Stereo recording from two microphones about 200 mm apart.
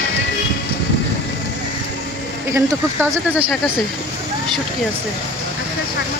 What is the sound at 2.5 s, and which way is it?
Speech, 10° right (ahead or behind).